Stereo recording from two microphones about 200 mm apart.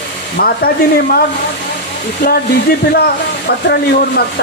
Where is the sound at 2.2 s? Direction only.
50° left (ahead or behind).